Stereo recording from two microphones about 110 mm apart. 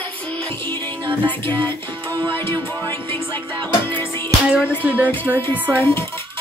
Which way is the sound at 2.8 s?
40° right (ahead or behind).